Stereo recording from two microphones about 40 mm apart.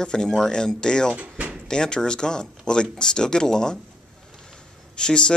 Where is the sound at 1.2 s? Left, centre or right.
Right.